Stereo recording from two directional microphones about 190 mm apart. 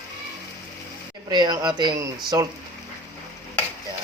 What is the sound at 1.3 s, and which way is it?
Speech, 20° right (ahead or behind).